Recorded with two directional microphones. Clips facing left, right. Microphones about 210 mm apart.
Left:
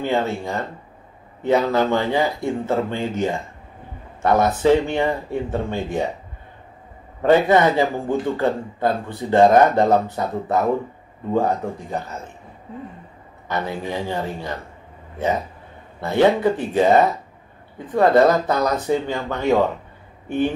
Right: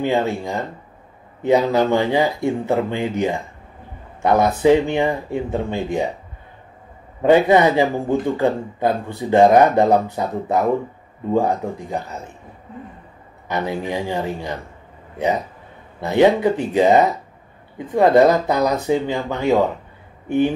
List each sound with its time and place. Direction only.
0.0 s speech: 15° right (ahead or behind)
7.2 s speech: 15° right (ahead or behind)
13.5 s speech: 15° right (ahead or behind)